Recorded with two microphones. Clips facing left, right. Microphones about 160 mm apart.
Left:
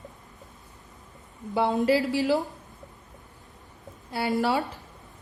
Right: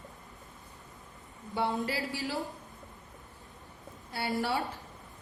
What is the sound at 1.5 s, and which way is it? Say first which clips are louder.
Speech: left 9 dB; 90° left.